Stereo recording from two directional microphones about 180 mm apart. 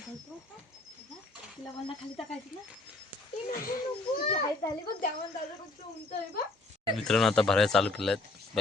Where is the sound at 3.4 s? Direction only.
50° left (ahead or behind).